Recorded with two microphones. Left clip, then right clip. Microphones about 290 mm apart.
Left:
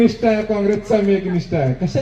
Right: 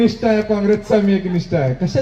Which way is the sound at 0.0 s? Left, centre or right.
Right.